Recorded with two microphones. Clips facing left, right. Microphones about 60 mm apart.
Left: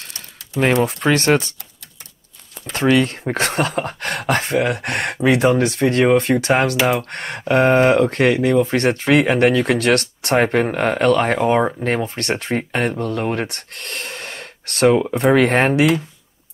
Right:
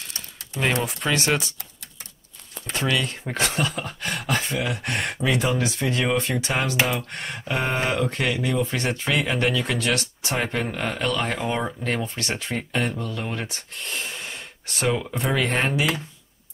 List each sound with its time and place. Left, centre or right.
0.8 s speech: left
2.7 s speech: left
8.0 s speech: left
10.3 s speech: left
14.9 s speech: left